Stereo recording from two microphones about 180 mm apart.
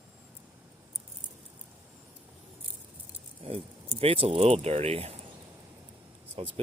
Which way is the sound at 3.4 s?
35° right (ahead or behind).